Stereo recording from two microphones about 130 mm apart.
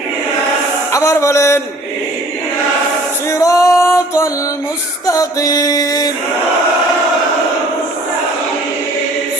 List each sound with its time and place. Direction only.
0.9 s music: 25° left (ahead or behind)
3.2 s music: 25° left (ahead or behind)